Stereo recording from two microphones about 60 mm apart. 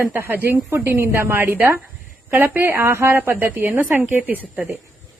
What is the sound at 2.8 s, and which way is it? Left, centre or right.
Speech, right.